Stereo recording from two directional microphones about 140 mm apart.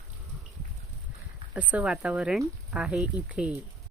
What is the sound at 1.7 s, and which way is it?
Speech, 10° right (ahead or behind).